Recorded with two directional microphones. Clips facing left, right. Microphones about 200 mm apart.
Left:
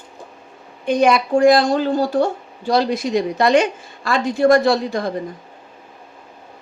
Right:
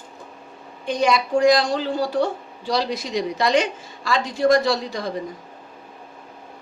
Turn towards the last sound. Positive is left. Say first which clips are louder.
# left 5 dB
turn(degrees=50)  # may be behind; listen again after turning